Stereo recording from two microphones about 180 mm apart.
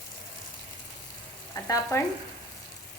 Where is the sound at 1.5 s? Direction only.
15° left (ahead or behind).